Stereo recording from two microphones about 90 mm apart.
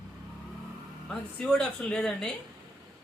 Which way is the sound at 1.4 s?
10° left (ahead or behind).